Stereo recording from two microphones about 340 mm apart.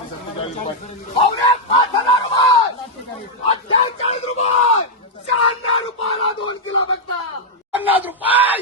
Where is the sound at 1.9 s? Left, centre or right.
Centre.